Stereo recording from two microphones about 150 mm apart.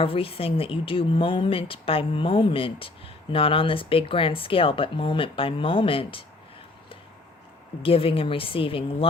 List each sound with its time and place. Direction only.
0.0 s speech: 40° left (ahead or behind)
7.8 s speech: 35° left (ahead or behind)